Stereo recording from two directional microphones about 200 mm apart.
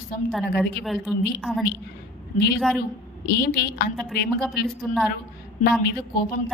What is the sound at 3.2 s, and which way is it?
Speech, 50° left (ahead or behind).